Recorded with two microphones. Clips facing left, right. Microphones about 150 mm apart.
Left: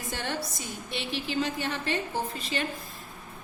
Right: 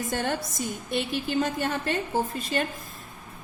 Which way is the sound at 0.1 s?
45° right (ahead or behind).